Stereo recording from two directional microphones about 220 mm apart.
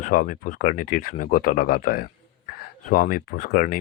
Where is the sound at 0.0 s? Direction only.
40° left (ahead or behind).